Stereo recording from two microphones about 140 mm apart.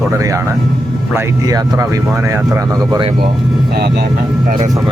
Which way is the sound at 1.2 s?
25° right (ahead or behind).